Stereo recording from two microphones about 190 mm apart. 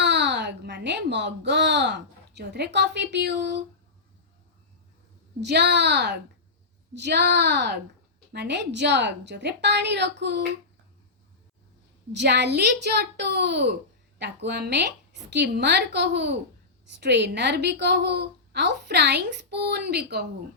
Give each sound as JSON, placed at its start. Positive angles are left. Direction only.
{"t": 0.0, "sound": "a child's voice", "side_deg": -65}
{"t": 5.4, "sound": "a woman's voice", "side_deg": -65}
{"t": 12.1, "sound": "a woman's voice", "side_deg": -60}